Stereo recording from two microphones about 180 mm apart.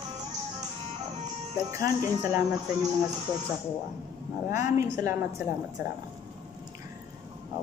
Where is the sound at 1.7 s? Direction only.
20° right (ahead or behind).